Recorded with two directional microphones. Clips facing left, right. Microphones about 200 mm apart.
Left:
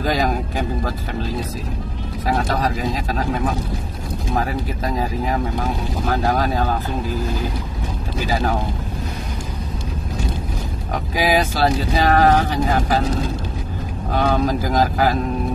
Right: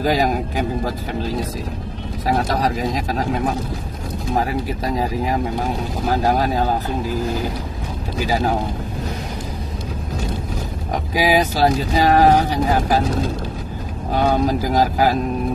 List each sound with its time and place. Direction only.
0.0 s speech: 10° right (ahead or behind)
6.3 s speech: 15° right (ahead or behind)
11.1 s speech: 15° right (ahead or behind)
14.1 s speech: 15° right (ahead or behind)